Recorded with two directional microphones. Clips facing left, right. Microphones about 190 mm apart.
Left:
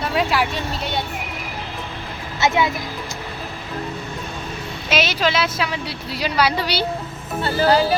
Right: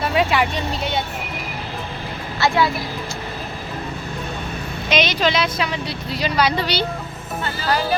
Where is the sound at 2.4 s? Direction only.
20° left (ahead or behind).